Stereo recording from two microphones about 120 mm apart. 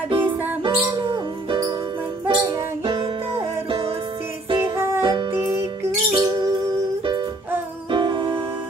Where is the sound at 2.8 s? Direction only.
50° right (ahead or behind).